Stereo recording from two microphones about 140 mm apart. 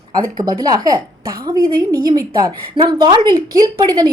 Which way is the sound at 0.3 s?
25° right (ahead or behind).